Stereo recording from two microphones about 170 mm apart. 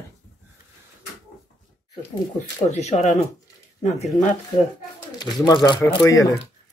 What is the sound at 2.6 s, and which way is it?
Speech, 40° left (ahead or behind).